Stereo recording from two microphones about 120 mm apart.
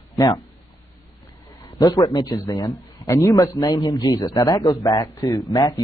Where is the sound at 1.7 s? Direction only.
30° left (ahead or behind).